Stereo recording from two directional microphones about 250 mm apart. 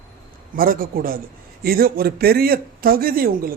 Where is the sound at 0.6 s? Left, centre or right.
Right.